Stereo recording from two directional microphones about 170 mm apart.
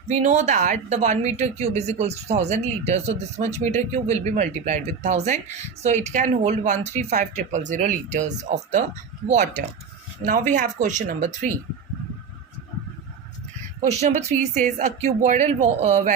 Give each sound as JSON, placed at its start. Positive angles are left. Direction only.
{"t": 0.1, "sound": "a woman's voice", "side_deg": -40}
{"t": 10.5, "sound": "speech", "side_deg": -45}
{"t": 14.0, "sound": "speech", "side_deg": -40}